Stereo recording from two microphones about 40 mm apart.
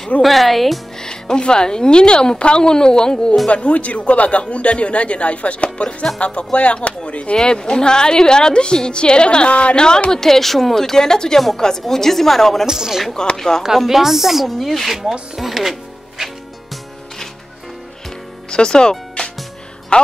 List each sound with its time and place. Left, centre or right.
0.2 s speech: centre
0.9 s a woman's voice: centre
3.4 s a man's voice: left
7.3 s a woman's voice: left
10.1 s speech: centre
12.6 s speech: centre
13.1 s speech: centre
13.8 s speech: centre
15.3 s music: centre
18.5 s speech: left